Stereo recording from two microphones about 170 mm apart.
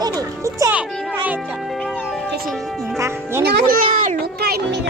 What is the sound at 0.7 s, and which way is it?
Speech, 10° right (ahead or behind).